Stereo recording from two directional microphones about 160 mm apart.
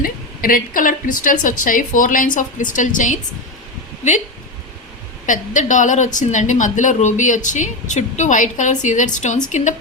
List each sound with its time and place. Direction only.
0.0 s a woman's voice: 60° left (ahead or behind)
5.2 s a woman's voice: 55° left (ahead or behind)